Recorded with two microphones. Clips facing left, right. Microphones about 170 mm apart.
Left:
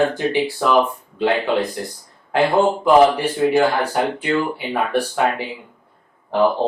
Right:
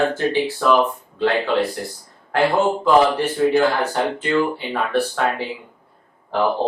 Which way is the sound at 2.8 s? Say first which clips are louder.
Left 3 dB; 15° left (ahead or behind).